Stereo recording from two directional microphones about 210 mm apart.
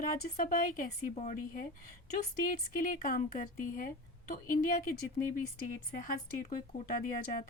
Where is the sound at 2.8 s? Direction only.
40° left (ahead or behind).